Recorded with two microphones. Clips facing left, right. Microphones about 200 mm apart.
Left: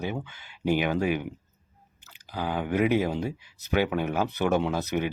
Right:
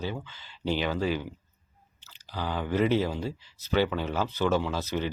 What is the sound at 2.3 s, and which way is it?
Speech, 15° left (ahead or behind).